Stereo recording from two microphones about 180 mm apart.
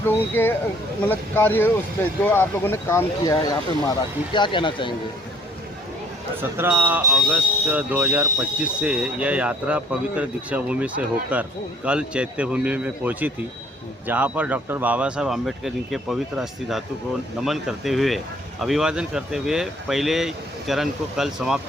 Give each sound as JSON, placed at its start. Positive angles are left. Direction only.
{"t": 0.4, "sound": "speech", "side_deg": 10}
{"t": 6.6, "sound": "speech", "side_deg": -10}